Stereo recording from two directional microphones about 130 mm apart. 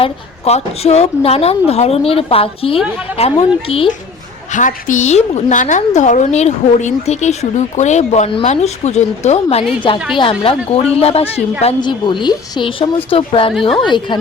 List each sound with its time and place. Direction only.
0.0 s a woman's voice: 55° left (ahead or behind)
4.5 s a woman's voice: 75° left (ahead or behind); by 9.6 s 55° left (ahead or behind)
9.8 s a woman's voice: 40° left (ahead or behind)
11.8 s a woman's voice: 35° left (ahead or behind)
13.5 s a woman's voice: centre (ahead or behind)
13.8 s speech: 35° left (ahead or behind)